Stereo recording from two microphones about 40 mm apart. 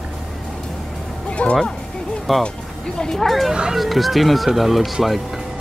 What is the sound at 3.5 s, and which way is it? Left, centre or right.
Speech, centre.